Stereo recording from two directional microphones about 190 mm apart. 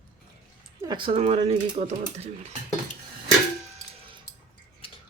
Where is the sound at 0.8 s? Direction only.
25° right (ahead or behind).